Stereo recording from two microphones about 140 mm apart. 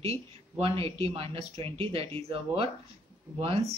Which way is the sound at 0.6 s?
45° right (ahead or behind).